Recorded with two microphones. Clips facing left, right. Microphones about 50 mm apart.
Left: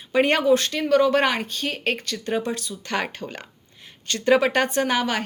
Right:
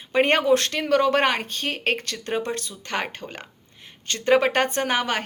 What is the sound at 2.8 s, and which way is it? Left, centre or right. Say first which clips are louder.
A woman's voice: left 2 dB; right.